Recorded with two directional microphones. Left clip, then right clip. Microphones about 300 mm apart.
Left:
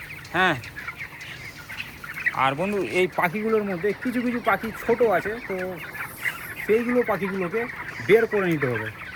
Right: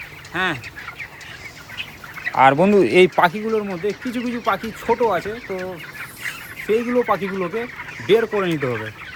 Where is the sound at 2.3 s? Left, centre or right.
Right.